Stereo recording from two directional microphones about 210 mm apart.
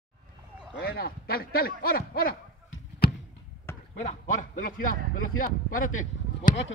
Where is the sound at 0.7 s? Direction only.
45° left (ahead or behind).